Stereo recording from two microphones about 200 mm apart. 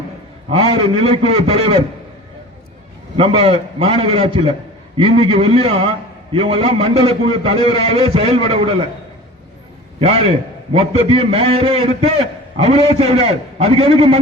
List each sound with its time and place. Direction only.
0.5 s a man's voice: 30° right (ahead or behind)
3.2 s a man's voice: 30° right (ahead or behind)
10.0 s a man's voice: 30° right (ahead or behind)